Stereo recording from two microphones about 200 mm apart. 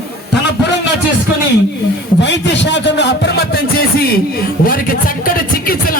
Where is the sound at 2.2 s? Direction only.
60° left (ahead or behind).